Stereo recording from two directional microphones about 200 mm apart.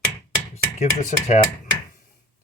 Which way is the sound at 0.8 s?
35° left (ahead or behind).